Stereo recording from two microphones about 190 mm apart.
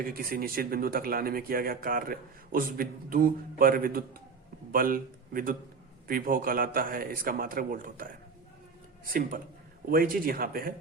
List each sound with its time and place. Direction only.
0.0 s a man's voice: 50° right (ahead or behind)